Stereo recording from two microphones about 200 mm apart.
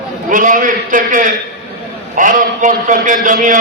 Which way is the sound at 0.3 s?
40° right (ahead or behind).